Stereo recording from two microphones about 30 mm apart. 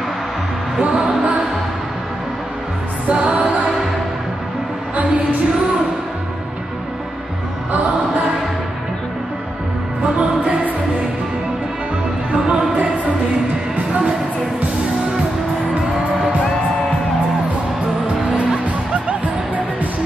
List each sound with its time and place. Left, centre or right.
0.8 s music: right
3.1 s music: right
4.9 s music: right
10.1 s music: right
12.3 s a sound: right
12.7 s music: right
19.0 s music: right